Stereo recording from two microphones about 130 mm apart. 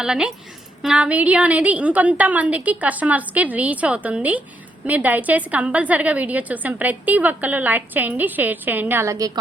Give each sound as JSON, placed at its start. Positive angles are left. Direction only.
{"t": 0.0, "sound": "a woman's voice", "side_deg": -5}